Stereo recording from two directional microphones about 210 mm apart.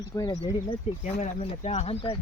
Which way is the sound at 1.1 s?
30° left (ahead or behind).